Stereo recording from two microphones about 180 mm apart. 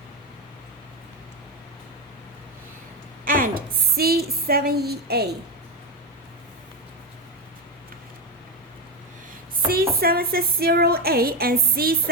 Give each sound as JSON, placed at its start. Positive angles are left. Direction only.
{"t": 3.2, "sound": "a woman's voice", "side_deg": -50}
{"t": 9.6, "sound": "a woman's voice", "side_deg": -55}